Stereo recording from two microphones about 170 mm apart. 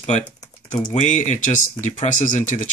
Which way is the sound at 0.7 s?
45° left (ahead or behind).